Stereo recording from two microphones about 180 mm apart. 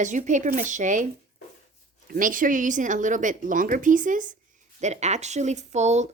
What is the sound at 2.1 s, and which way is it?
Speech, 50° right (ahead or behind).